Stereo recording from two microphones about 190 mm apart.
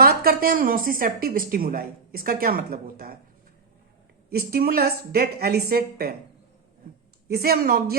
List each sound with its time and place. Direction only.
0.0 s a woman's voice: 50° right (ahead or behind)
4.3 s a woman's voice: 55° right (ahead or behind)
7.3 s a woman's voice: 55° right (ahead or behind)